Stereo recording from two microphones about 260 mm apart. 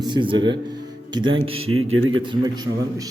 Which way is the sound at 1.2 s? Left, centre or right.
Right.